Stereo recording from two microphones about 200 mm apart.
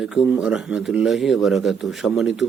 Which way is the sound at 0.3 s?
5° right (ahead or behind).